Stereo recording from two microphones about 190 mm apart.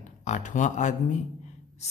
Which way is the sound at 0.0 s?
40° left (ahead or behind).